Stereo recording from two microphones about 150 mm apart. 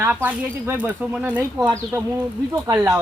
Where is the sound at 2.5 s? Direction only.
20° right (ahead or behind).